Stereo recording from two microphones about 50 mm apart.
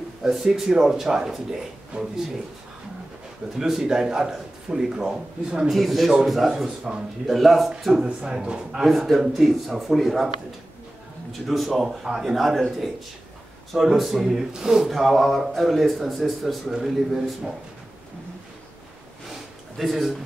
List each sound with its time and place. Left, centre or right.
0.2 s a man's voice: centre
3.5 s a man's voice: centre
5.8 s a man's voice: centre
8.3 s a man's voice: centre
8.7 s speech: centre
11.3 s a man's voice: centre
14.9 s a man's voice: centre
19.8 s speech: centre